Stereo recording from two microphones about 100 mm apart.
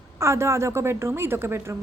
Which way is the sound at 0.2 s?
30° right (ahead or behind).